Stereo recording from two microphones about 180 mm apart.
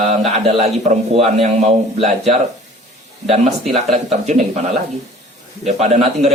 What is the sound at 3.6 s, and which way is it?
Speech, centre (ahead or behind).